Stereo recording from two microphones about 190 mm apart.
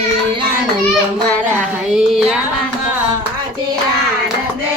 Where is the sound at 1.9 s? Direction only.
Centre (ahead or behind).